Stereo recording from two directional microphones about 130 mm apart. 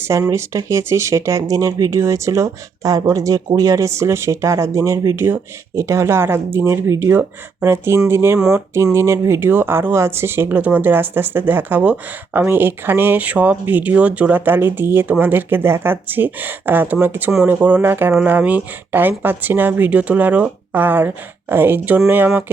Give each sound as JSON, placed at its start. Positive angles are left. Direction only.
{"t": 0.1, "sound": "speech", "side_deg": -25}